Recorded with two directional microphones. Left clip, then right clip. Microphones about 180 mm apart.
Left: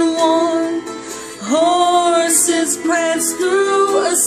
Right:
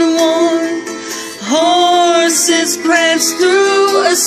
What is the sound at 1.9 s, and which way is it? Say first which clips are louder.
Music: right 3 dB; 15° left (ahead or behind).